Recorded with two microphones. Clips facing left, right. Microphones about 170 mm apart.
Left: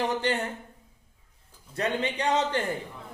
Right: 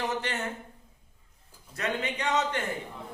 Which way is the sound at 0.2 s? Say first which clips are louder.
Left 6 dB; 35° left (ahead or behind).